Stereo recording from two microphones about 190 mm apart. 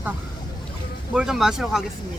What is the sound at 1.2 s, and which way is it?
Speech, centre (ahead or behind).